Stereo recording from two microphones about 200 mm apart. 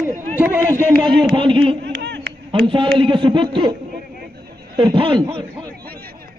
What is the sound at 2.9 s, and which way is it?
Speech, 25° right (ahead or behind).